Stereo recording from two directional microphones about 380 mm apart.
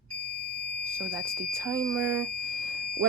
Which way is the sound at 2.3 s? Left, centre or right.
Right.